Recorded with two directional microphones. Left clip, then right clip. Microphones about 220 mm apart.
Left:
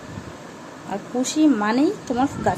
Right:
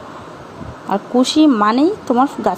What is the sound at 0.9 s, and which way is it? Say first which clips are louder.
Speech: right 10 dB; 25° right (ahead or behind).